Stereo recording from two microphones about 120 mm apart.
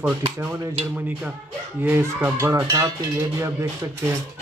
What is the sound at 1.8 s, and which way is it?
Speech, 20° right (ahead or behind).